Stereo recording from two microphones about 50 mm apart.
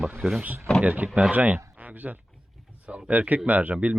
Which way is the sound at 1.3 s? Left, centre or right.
Right.